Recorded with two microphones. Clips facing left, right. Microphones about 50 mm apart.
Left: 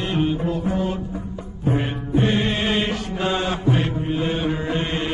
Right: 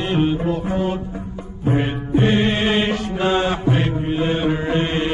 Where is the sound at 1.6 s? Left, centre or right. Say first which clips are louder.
Right 3 dB; right.